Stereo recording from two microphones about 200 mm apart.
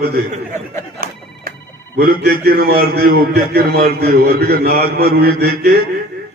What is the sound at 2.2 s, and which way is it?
A man's voice, 50° right (ahead or behind).